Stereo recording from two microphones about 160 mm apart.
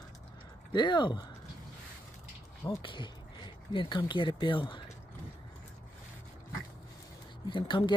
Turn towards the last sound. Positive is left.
turn(degrees=30)  # may be behind; listen again after turning